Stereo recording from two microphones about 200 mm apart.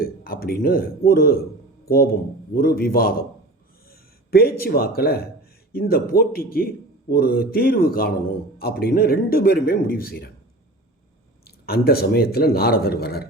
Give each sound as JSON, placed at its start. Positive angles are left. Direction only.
{"t": 0.0, "sound": "a man's voice", "side_deg": 50}
{"t": 11.4, "sound": "a man's voice", "side_deg": 50}